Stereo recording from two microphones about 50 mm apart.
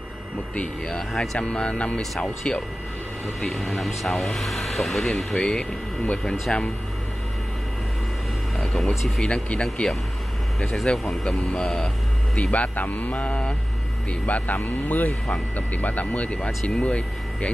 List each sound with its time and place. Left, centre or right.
0.6 s speech: centre
3.3 s speech: centre
6.5 s speech: centre
9.2 s speech: centre
10.6 s speech: centre
12.4 s speech: left
14.6 s speech: left